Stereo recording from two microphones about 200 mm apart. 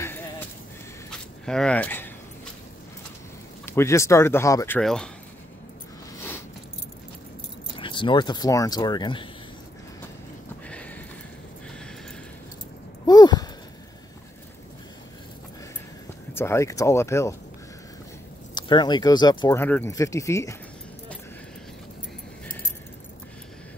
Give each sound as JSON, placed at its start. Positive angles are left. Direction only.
{"t": 0.0, "sound": "a sound", "side_deg": 15}
{"t": 1.4, "sound": "speech", "side_deg": 5}
{"t": 3.6, "sound": "speech", "side_deg": 15}
{"t": 7.7, "sound": "speech", "side_deg": 25}
{"t": 10.7, "sound": "a sound", "side_deg": 5}
{"t": 13.0, "sound": "a sound", "side_deg": 20}
{"t": 16.3, "sound": "speech", "side_deg": 15}
{"t": 18.5, "sound": "speech", "side_deg": 20}
{"t": 19.6, "sound": "speech", "side_deg": 10}